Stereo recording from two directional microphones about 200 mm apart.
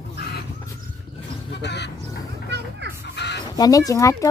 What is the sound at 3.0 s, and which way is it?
Crow, 55° left (ahead or behind).